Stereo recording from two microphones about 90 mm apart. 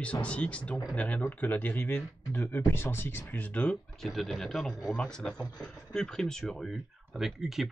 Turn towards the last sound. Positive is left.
turn(degrees=-5)  # may be behind; listen again after turning